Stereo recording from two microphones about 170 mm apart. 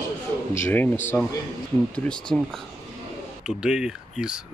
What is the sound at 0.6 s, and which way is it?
Speech, 10° left (ahead or behind).